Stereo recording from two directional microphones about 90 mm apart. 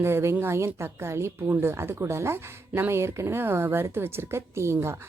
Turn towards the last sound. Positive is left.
turn(degrees=-30)  # may be behind; listen again after turning